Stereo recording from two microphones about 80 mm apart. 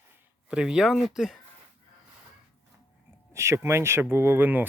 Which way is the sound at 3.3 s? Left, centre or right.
Right.